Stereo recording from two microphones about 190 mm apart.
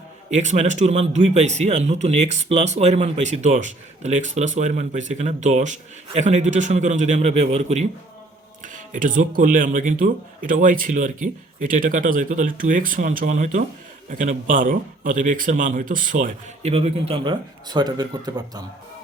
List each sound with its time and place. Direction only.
0.3 s a man's voice: 35° right (ahead or behind); by 18.6 s 20° right (ahead or behind)